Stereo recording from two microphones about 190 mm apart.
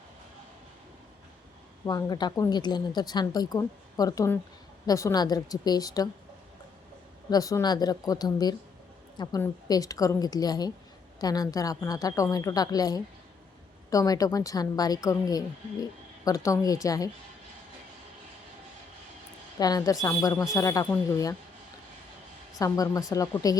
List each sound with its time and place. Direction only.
1.8 s a woman's voice: 20° left (ahead or behind)
7.3 s a woman's voice: 20° left (ahead or behind)
19.5 s a woman's voice: 20° left (ahead or behind)
22.5 s a woman's voice: 20° left (ahead or behind)